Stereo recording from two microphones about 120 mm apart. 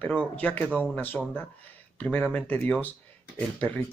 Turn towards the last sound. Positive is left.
turn(degrees=10)  # may be behind; listen again after turning